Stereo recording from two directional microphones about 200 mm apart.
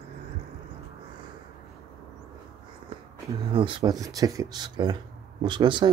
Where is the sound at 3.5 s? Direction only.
25° right (ahead or behind).